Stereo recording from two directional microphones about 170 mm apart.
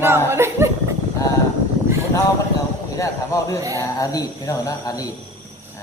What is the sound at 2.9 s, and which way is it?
Speech, 20° left (ahead or behind).